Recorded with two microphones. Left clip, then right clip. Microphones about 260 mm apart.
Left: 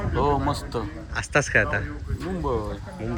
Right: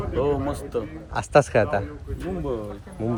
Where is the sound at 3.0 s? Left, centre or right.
Centre.